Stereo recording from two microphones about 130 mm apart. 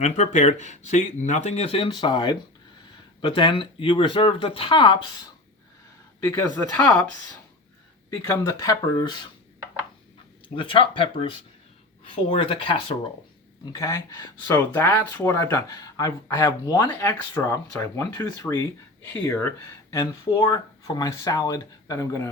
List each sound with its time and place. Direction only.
0.0 s speech: 60° left (ahead or behind); by 4.9 s 40° left (ahead or behind)
6.1 s speech: 15° left (ahead or behind)
8.2 s speech: 25° left (ahead or behind)
10.5 s speech: 40° left (ahead or behind)
13.7 s speech: 25° left (ahead or behind)